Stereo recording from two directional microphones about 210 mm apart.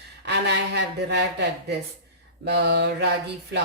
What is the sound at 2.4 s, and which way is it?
Mantra, 55° right (ahead or behind).